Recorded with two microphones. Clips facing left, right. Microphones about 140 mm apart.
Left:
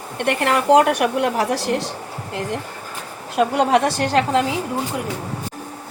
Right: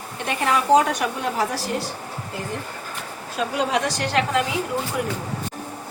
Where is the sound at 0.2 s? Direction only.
70° left (ahead or behind); by 1.9 s 90° left.